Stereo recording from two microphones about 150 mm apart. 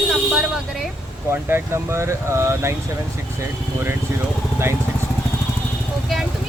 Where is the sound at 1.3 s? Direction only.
15° right (ahead or behind).